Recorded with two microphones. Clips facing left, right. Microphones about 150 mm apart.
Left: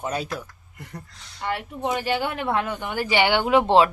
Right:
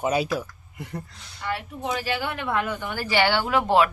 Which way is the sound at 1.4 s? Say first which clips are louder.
Left 3 dB; 25° left (ahead or behind).